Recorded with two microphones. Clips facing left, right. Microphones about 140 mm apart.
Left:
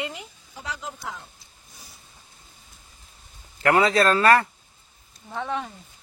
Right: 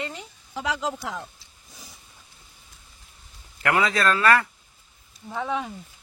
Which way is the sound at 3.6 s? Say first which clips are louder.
Left 4 dB; 35° left (ahead or behind).